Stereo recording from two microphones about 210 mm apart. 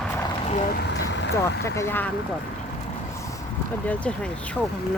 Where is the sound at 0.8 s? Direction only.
55° left (ahead or behind).